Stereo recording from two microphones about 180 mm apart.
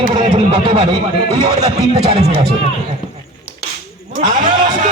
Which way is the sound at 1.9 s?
35° right (ahead or behind).